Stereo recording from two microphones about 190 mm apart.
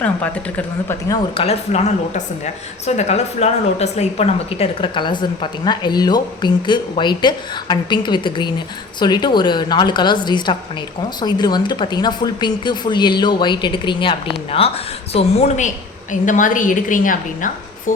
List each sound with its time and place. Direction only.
0.0 s a woman's voice: 10° left (ahead or behind)
1.4 s a woman's voice: 35° left (ahead or behind)